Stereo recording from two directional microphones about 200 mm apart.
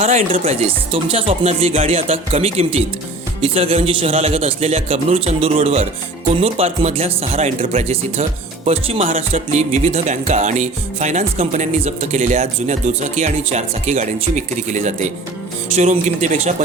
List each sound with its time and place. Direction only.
0.0 s music: 35° right (ahead or behind)
3.4 s speech: 30° right (ahead or behind)